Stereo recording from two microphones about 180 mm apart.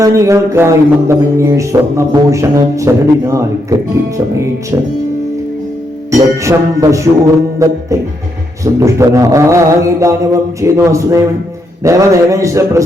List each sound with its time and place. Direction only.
0.0 s music: 15° right (ahead or behind)
6.1 s music: 15° right (ahead or behind)